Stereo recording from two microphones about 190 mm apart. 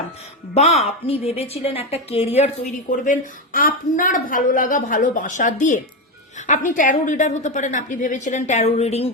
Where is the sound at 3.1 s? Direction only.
45° left (ahead or behind).